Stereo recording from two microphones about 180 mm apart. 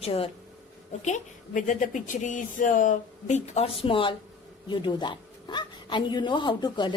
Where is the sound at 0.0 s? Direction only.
35° left (ahead or behind).